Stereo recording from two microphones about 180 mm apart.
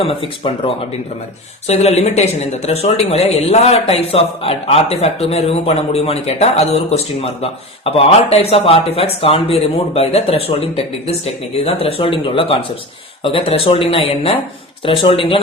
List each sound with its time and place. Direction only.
0.0 s speech: 30° left (ahead or behind)
1.6 s speech: 35° left (ahead or behind)
14.8 s speech: 30° left (ahead or behind)